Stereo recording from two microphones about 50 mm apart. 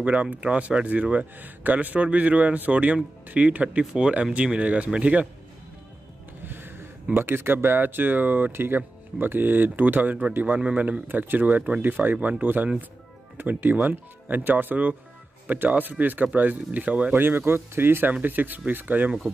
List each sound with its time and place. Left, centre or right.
0.0 s speech: right
6.4 s a sound: right
7.2 s speech: right
8.5 s speech: right
17.2 s speech: right